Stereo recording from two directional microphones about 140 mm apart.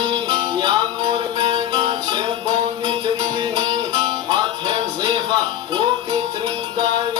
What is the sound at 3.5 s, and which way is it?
Music, 30° right (ahead or behind).